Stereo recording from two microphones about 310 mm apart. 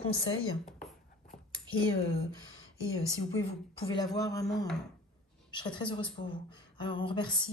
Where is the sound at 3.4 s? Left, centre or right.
Centre.